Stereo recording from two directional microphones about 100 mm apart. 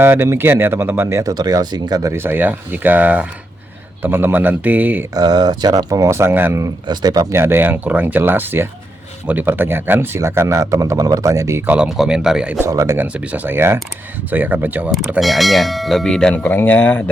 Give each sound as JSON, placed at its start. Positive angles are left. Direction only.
{"t": 0.0, "sound": "speech", "side_deg": -25}
{"t": 1.2, "sound": "speech", "side_deg": -40}
{"t": 2.1, "sound": "speech", "side_deg": -20}
{"t": 5.1, "sound": "speech", "side_deg": -45}
{"t": 6.8, "sound": "speech", "side_deg": -45}
{"t": 7.3, "sound": "speech", "side_deg": -20}
{"t": 11.6, "sound": "speech", "side_deg": -15}
{"t": 12.5, "sound": "speech", "side_deg": -30}
{"t": 13.0, "sound": "speech", "side_deg": -15}
{"t": 15.2, "sound": "bell", "side_deg": 0}